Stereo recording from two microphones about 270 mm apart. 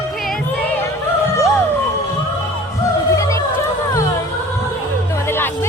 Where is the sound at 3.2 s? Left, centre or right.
Centre.